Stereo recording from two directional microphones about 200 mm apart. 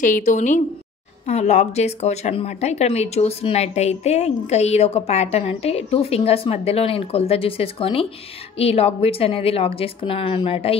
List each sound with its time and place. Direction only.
0.0 s a woman's voice: 40° left (ahead or behind)